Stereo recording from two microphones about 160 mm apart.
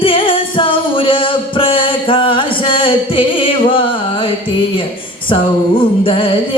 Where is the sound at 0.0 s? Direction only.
35° left (ahead or behind).